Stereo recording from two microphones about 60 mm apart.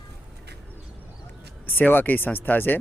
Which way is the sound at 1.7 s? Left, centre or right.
Left.